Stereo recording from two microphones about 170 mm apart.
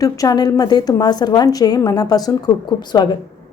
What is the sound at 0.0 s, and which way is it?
A woman's voice, 20° left (ahead or behind).